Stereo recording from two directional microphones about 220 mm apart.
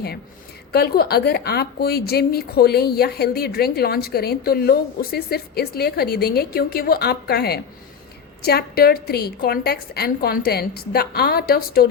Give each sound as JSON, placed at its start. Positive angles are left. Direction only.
{"t": 0.7, "sound": "a woman's voice", "side_deg": 45}